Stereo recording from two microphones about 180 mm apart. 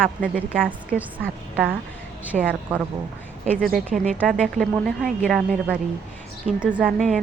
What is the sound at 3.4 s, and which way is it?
Speech, 50° right (ahead or behind).